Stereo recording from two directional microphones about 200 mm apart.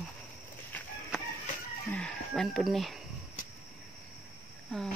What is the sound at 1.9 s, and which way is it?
Speech, 5° left (ahead or behind).